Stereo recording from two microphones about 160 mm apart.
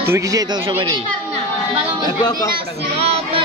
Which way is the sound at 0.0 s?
20° right (ahead or behind).